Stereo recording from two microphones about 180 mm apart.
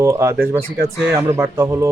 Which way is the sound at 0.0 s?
15° right (ahead or behind).